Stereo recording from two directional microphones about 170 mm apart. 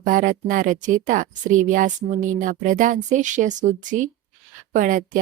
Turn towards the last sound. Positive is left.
turn(degrees=-50)  # may be behind; listen again after turning